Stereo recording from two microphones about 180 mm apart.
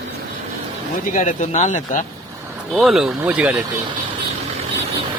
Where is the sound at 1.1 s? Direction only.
45° left (ahead or behind).